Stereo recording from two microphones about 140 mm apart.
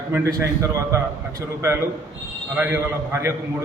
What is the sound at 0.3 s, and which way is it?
Speech, 20° right (ahead or behind).